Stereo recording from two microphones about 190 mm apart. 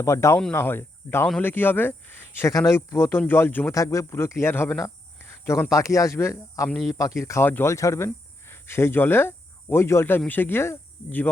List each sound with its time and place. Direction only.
0.0 s speech: 15° left (ahead or behind)